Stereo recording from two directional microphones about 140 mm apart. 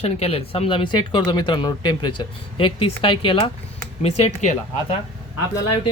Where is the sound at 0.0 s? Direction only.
45° left (ahead or behind).